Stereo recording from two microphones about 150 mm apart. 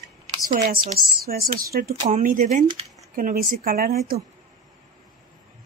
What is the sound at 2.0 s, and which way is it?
Speech, 60° right (ahead or behind).